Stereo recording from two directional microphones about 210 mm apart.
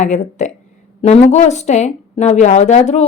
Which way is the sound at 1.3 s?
35° left (ahead or behind).